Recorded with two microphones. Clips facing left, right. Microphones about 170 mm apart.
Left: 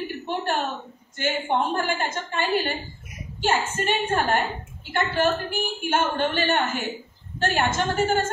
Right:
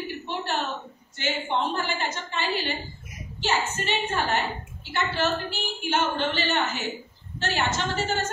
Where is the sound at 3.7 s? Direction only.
50° left (ahead or behind).